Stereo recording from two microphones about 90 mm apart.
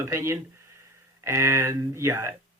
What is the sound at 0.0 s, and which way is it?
Speech, 30° right (ahead or behind).